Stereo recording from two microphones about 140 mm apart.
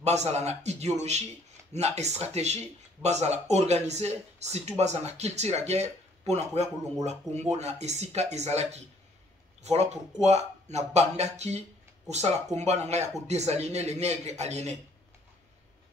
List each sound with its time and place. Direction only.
0.0 s speech: 50° right (ahead or behind)